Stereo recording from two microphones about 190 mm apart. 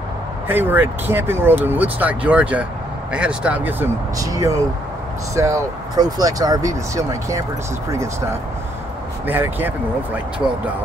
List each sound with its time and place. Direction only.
0.5 s speech: 10° right (ahead or behind)
9.3 s speech: 10° right (ahead or behind)